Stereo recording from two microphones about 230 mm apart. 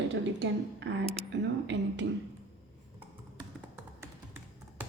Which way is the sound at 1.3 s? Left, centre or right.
Right.